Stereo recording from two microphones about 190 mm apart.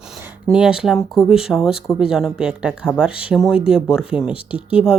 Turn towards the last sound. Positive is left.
turn(degrees=25)  # may be behind; listen again after turning